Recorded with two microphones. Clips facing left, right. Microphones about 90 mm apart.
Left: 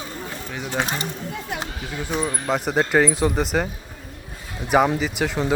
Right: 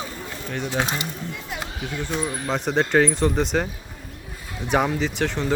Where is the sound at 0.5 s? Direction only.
5° left (ahead or behind).